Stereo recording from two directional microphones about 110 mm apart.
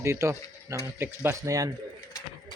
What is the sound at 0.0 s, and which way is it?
Speech, 25° right (ahead or behind).